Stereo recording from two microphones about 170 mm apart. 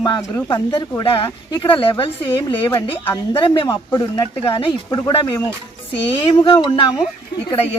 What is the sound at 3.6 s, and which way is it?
A woman's voice, 20° left (ahead or behind).